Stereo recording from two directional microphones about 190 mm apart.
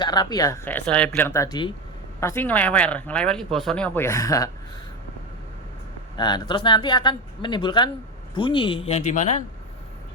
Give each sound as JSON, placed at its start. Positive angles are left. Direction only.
{"t": 0.0, "sound": "speech", "side_deg": 20}
{"t": 6.1, "sound": "speech", "side_deg": 20}